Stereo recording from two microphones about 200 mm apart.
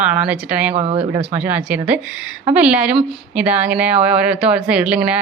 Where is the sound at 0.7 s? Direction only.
30° right (ahead or behind).